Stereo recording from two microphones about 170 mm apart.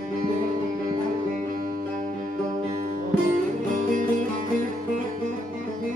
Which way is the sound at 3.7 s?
50° right (ahead or behind).